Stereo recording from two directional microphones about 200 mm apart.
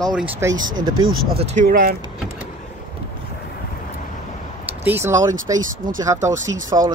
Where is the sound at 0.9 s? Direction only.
90° right.